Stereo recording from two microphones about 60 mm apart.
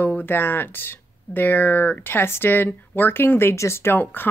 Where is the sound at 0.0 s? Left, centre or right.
Left.